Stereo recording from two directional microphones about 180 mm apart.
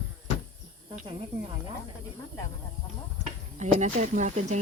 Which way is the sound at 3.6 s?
45° right (ahead or behind).